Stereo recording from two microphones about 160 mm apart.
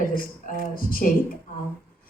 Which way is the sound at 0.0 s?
60° left (ahead or behind).